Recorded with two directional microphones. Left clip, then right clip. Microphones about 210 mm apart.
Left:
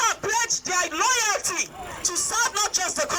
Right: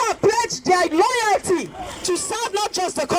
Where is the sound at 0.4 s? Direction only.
55° right (ahead or behind).